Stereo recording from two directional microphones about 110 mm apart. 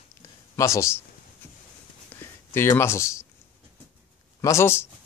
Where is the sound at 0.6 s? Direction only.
25° left (ahead or behind).